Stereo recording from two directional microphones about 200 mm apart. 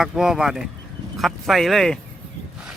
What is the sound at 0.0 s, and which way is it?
Speech, centre (ahead or behind).